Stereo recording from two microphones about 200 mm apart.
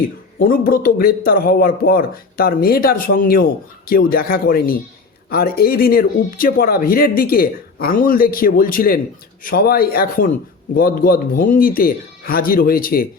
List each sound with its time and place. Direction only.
0.3 s speech: 45° left (ahead or behind)